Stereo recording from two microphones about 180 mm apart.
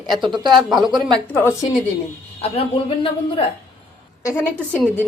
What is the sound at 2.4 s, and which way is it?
A woman's voice, 35° left (ahead or behind).